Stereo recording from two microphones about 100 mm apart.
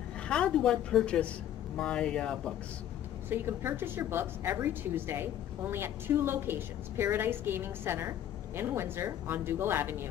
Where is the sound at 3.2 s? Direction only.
20° right (ahead or behind).